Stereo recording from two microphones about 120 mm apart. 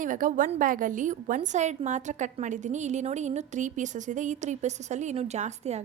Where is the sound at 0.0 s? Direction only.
90° right.